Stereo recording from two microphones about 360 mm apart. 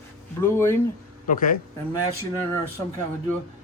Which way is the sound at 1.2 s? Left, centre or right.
Left.